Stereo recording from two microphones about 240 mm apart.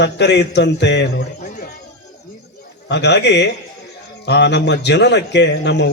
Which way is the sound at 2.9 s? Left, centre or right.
Left.